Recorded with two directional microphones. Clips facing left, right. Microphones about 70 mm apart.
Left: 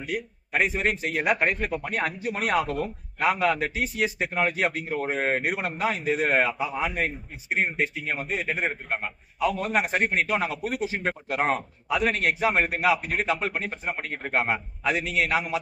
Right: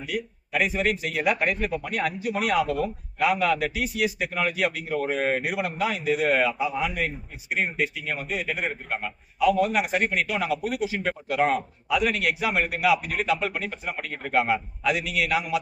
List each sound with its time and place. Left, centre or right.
0.0 s a man's voice: left
5.4 s a man's voice: left